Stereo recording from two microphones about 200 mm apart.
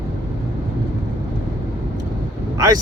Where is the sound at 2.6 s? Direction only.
20° right (ahead or behind).